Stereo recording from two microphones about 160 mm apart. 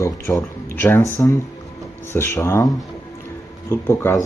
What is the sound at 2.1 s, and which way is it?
Speech, 15° left (ahead or behind).